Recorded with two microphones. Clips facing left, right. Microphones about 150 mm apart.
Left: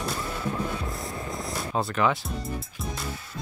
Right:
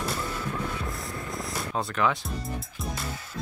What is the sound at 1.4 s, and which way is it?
Music, centre (ahead or behind).